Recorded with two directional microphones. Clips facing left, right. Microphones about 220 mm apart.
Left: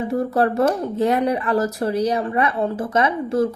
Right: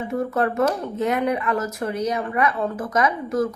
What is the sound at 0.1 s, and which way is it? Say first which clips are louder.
Speech: left 2 dB; 35° left (ahead or behind).